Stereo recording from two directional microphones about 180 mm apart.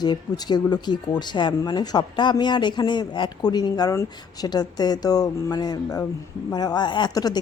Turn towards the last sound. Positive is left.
turn(degrees=20)  # may be behind; listen again after turning